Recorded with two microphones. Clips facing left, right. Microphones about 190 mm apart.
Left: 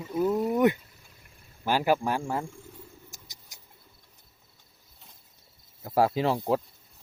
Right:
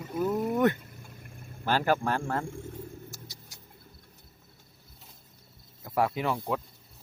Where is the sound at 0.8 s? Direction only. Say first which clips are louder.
Right 9 dB; 55° right (ahead or behind).